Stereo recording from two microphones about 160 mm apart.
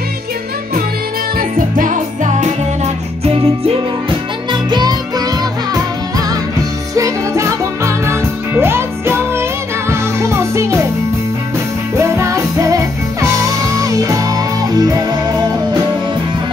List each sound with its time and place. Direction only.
1.8 s music: 50° right (ahead or behind)
4.5 s music: 25° right (ahead or behind)
7.0 s music: 20° right (ahead or behind)
12.0 s music: 15° right (ahead or behind)